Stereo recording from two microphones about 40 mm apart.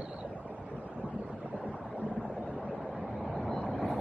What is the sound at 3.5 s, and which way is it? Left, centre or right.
Vehicle, centre.